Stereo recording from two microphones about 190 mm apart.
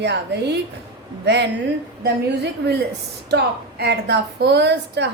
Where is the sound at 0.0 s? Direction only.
65° right (ahead or behind).